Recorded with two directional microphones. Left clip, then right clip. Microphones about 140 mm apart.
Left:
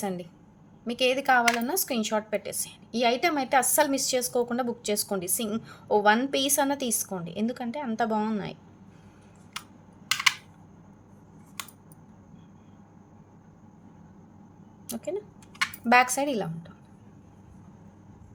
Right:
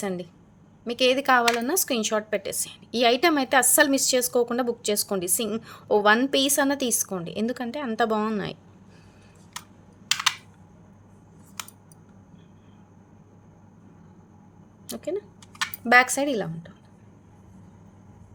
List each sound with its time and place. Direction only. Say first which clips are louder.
0.0 s a woman's voice: right 2 dB; 30° right (ahead or behind)
14.8 s speech: right 3 dB; 25° right (ahead or behind)